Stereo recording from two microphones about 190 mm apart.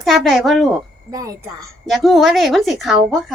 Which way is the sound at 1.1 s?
20° right (ahead or behind).